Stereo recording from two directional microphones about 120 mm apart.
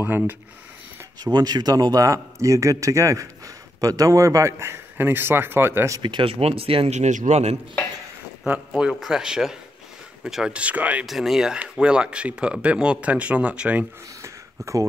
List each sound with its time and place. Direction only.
0.0 s speech: 15° right (ahead or behind)
1.2 s speech: 35° right (ahead or behind); by 5.9 s 20° right (ahead or behind)
5.9 s speech: 40° right (ahead or behind)
6.9 s speech: 80° right
8.5 s speech: 5° right (ahead or behind)
14.2 s a sound: 25° right (ahead or behind)